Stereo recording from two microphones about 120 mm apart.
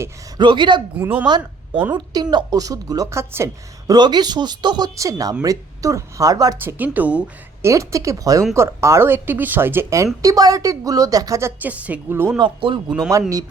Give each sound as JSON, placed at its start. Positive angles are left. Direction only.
{"t": 0.3, "sound": "speech", "side_deg": -40}
{"t": 0.9, "sound": "a woman's voice", "side_deg": -15}
{"t": 1.9, "sound": "speech", "side_deg": -35}
{"t": 3.9, "sound": "speech", "side_deg": -35}
{"t": 6.6, "sound": "a woman's voice", "side_deg": -15}
{"t": 7.6, "sound": "speech", "side_deg": -25}
{"t": 12.4, "sound": "speech", "side_deg": -40}